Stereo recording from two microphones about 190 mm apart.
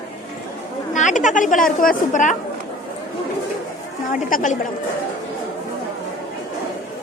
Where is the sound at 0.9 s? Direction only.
40° left (ahead or behind).